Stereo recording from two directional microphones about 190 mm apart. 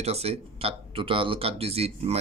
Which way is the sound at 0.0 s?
35° right (ahead or behind).